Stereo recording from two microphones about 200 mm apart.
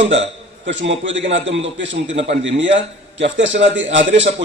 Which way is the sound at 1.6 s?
65° right (ahead or behind).